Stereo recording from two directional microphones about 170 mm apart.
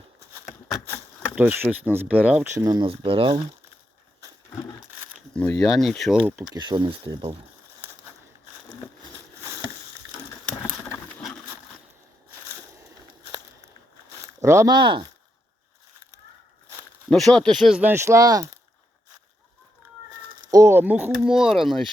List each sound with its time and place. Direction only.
1.4 s speech: 10° right (ahead or behind); by 3.4 s 35° right (ahead or behind)
5.3 s speech: 5° left (ahead or behind)
6.5 s speech: 25° right (ahead or behind)
14.4 s speech: 15° right (ahead or behind)
17.1 s speech: 5° left (ahead or behind); by 18.4 s 20° right (ahead or behind)
20.5 s speech: 15° right (ahead or behind); by 21.8 s centre (ahead or behind)